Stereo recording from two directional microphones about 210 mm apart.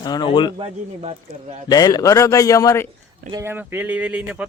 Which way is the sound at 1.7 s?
15° left (ahead or behind).